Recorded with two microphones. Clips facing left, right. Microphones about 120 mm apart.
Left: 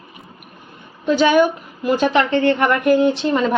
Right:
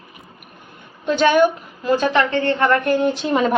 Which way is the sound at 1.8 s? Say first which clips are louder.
Left 1 dB; 25° left (ahead or behind).